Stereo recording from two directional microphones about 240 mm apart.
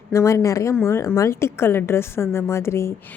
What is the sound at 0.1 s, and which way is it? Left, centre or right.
A woman's voice, centre.